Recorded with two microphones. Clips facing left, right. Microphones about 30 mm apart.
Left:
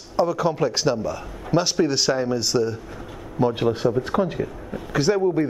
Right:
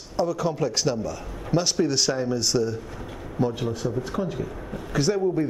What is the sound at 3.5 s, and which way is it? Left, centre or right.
Speech, left.